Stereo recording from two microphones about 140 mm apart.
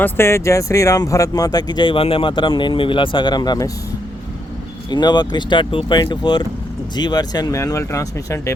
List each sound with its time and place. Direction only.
0.0 s speech: 15° left (ahead or behind)
4.9 s speech: 30° left (ahead or behind)